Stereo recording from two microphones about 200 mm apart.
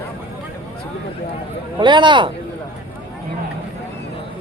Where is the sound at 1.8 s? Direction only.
25° right (ahead or behind).